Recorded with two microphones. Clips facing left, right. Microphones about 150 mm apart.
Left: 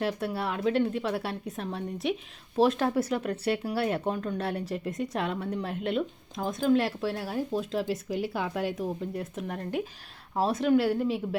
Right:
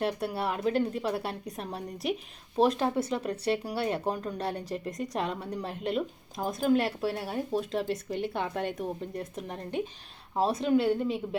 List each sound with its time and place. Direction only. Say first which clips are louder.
0.0 s a woman's voice: even; centre (ahead or behind)
2.8 s speech: left 2 dB; 25° right (ahead or behind)
3.6 s a woman's voice: left 2 dB; centre (ahead or behind)
10.6 s a woman's voice: left 3 dB; centre (ahead or behind)